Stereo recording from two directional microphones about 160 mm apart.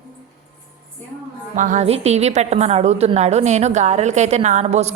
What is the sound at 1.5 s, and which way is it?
A woman's voice, 50° right (ahead or behind).